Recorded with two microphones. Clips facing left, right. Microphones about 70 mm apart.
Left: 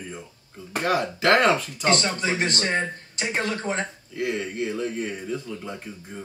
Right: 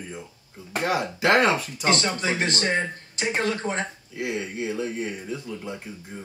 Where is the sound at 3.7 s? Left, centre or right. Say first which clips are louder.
Left 1 dB; centre.